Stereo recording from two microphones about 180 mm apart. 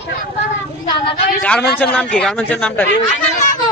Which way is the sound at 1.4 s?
10° left (ahead or behind).